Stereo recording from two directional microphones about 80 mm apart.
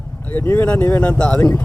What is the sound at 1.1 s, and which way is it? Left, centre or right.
Speech, centre.